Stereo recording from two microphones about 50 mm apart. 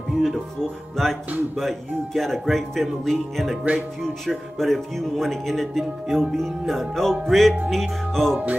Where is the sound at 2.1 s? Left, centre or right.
Centre.